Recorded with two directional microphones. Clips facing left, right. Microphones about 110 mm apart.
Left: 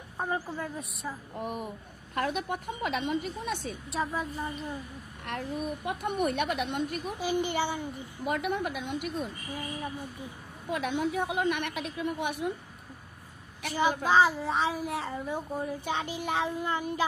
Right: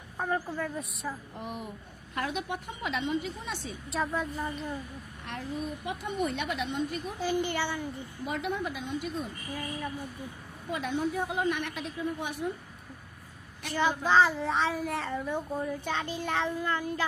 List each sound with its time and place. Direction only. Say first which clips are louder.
0.2 s speech: right 1 dB; 5° left (ahead or behind)
1.4 s a woman's voice: left 3 dB; 50° left (ahead or behind)
3.9 s speech: right 1 dB; centre (ahead or behind)
5.2 s a woman's voice: left 2 dB; 55° left (ahead or behind)
7.2 s a sound: left 1 dB; 15° left (ahead or behind)
8.2 s a woman's voice: left 3 dB; 60° left (ahead or behind)
9.5 s a sound: even; 15° left (ahead or behind)
10.7 s a woman's voice: left 1 dB; 65° left (ahead or behind)
14.1 s speech: right 1 dB; centre (ahead or behind)
15.6 s a sound: even; 15° left (ahead or behind)